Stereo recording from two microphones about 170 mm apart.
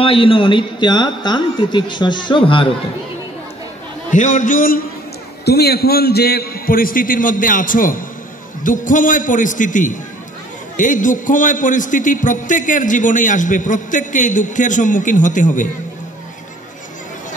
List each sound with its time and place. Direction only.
0.0 s a woman's voice: 30° left (ahead or behind)
4.1 s a man's voice: 50° left (ahead or behind)
5.4 s a man's voice: 70° left (ahead or behind); by 15.7 s 50° left (ahead or behind)